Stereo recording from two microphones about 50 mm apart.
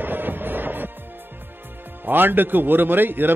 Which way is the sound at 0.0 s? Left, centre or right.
Right.